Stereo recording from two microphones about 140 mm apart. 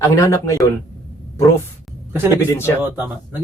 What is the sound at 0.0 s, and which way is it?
Speech, 20° left (ahead or behind).